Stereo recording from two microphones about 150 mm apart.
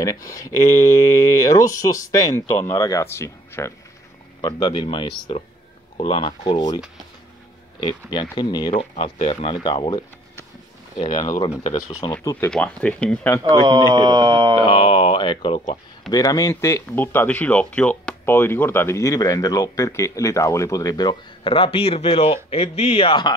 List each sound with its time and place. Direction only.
0.0 s speech: 25° left (ahead or behind)
4.4 s speech: 30° left (ahead or behind)
7.8 s speech: 35° left (ahead or behind)
8.7 s speech: 45° left (ahead or behind)
11.0 s speech: 55° left (ahead or behind)
11.2 s speech: 25° left (ahead or behind)
12.4 s speech: 10° left (ahead or behind)
13.7 s speech: 30° right (ahead or behind)
14.6 s speech: 30° left (ahead or behind)